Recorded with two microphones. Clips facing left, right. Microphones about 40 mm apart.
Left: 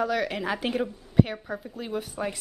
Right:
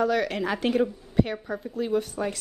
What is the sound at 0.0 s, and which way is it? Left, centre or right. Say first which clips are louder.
A woman's voice: right 2 dB; centre.